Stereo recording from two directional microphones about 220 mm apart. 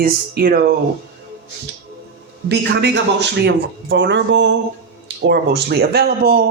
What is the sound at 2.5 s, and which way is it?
Speech, 50° right (ahead or behind).